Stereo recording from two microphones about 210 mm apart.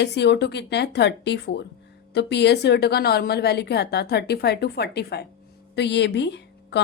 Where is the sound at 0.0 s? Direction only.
55° left (ahead or behind).